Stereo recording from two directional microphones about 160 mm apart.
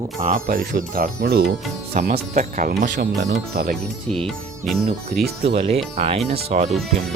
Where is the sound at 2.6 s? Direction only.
85° right.